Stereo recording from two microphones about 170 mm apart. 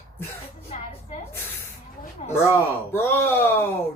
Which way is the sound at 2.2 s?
40° left (ahead or behind).